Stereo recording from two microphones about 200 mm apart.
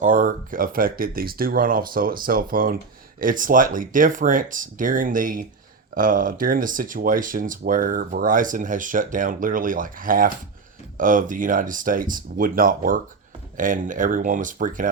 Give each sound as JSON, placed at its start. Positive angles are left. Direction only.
{"t": 0.0, "sound": "speech", "side_deg": -40}